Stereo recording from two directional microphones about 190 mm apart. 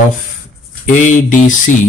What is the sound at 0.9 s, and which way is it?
Speech, 40° left (ahead or behind).